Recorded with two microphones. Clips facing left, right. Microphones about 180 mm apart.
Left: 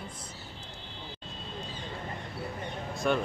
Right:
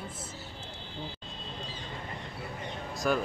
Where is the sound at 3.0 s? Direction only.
Centre (ahead or behind).